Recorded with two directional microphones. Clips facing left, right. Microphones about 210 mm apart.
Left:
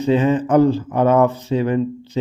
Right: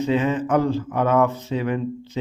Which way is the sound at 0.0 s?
35° left (ahead or behind).